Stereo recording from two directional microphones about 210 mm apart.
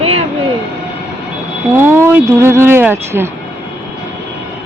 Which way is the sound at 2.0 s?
10° right (ahead or behind).